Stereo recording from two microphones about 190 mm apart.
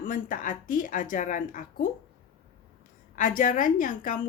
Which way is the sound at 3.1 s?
45° left (ahead or behind).